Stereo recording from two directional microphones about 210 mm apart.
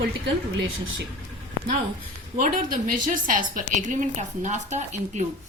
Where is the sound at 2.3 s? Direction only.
40° right (ahead or behind).